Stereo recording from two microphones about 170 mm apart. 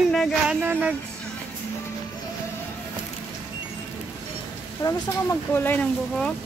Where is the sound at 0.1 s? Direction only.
Centre (ahead or behind).